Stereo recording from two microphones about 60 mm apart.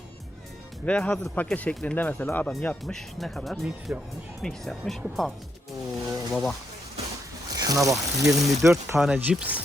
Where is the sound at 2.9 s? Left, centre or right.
Centre.